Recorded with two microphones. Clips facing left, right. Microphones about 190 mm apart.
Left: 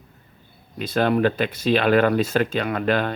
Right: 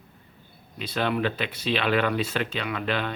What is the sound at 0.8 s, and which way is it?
Speech, 45° left (ahead or behind).